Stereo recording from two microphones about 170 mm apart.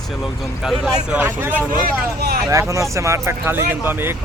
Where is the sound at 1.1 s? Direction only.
10° right (ahead or behind).